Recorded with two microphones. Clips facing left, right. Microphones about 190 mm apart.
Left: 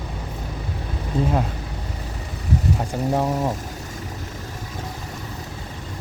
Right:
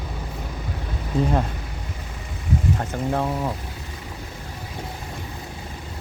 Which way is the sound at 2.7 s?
15° left (ahead or behind).